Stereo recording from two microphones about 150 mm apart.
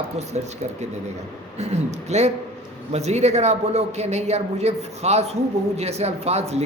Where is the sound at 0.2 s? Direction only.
50° right (ahead or behind).